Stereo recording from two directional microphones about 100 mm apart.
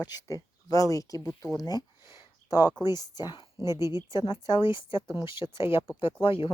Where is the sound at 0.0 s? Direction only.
40° left (ahead or behind).